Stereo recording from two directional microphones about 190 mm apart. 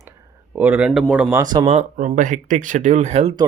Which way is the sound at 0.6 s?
5° right (ahead or behind).